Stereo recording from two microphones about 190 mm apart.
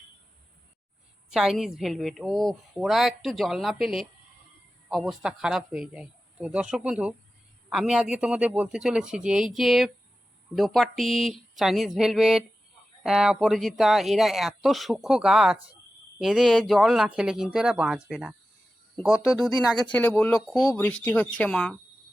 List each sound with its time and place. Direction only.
1.3 s a woman's voice: centre (ahead or behind)
15.5 s speech: 30° right (ahead or behind)
16.1 s a woman's voice: centre (ahead or behind)